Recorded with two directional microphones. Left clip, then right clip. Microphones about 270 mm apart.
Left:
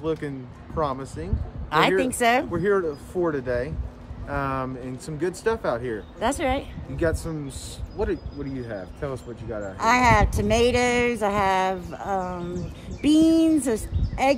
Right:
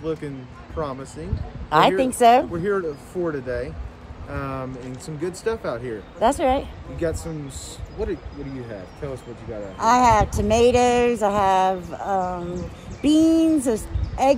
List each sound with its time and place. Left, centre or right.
0.0 s speech: centre
1.7 s speech: centre
2.5 s speech: centre
6.1 s speech: centre
7.0 s speech: centre
9.8 s speech: centre